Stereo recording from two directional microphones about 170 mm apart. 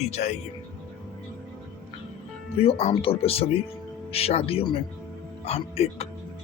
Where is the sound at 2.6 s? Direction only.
35° left (ahead or behind).